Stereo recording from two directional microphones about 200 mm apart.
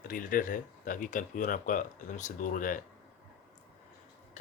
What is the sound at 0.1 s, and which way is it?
Speech, 45° left (ahead or behind).